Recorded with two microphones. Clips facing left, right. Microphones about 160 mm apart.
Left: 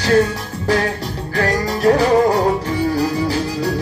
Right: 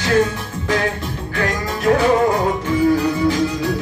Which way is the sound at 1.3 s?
35° left (ahead or behind).